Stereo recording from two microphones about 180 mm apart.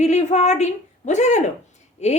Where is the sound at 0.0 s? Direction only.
40° left (ahead or behind).